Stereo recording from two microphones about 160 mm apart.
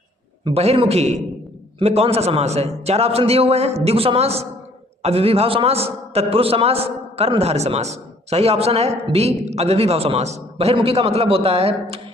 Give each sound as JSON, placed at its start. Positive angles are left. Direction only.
{"t": 0.4, "sound": "a man's voice", "side_deg": -40}